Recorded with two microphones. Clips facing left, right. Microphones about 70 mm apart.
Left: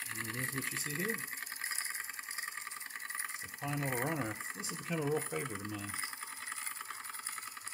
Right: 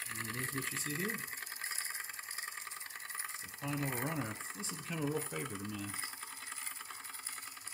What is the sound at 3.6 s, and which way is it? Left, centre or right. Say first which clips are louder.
Speech: left 2 dB; centre.